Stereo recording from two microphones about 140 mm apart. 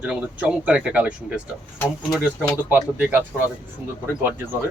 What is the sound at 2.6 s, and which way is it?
Speech, 15° right (ahead or behind).